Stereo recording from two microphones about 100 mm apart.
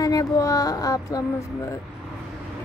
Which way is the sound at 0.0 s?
35° left (ahead or behind).